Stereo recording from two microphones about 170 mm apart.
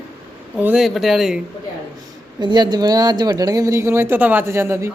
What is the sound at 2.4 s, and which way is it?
Speech, 25° right (ahead or behind).